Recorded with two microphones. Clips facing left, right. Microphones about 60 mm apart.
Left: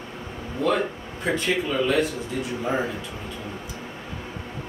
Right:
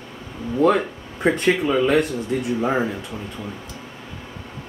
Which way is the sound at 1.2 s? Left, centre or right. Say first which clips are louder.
Right 7 dB; right.